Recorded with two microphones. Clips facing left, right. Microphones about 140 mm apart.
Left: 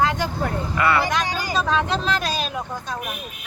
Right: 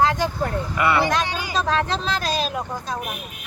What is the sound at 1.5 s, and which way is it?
Speech, centre (ahead or behind).